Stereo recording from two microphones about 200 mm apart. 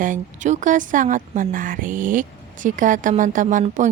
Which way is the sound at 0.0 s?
40° right (ahead or behind).